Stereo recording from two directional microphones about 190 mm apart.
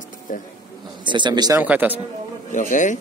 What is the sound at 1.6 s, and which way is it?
Speech, 10° right (ahead or behind).